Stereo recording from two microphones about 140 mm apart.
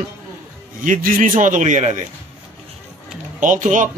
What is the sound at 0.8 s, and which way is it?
A man's voice, 75° right (ahead or behind).